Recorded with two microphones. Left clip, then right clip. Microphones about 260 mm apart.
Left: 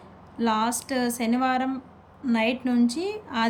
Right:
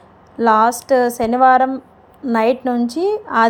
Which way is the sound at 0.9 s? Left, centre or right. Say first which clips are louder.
Right 17 dB; right.